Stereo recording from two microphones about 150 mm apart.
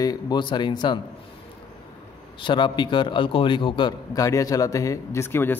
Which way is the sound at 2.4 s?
30° left (ahead or behind).